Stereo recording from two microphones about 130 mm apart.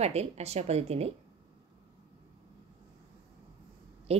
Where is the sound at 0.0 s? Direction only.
55° right (ahead or behind).